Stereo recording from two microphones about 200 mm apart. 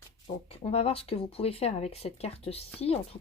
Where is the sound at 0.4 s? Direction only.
30° left (ahead or behind).